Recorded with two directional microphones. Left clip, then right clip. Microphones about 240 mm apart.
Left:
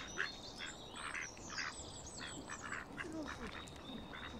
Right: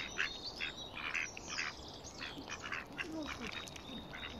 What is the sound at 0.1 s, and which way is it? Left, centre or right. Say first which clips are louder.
Squawk: right 4 dB; right.